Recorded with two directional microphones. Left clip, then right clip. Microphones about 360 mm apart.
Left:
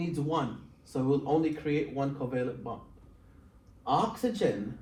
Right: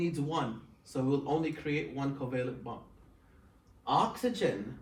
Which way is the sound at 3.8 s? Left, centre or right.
Centre.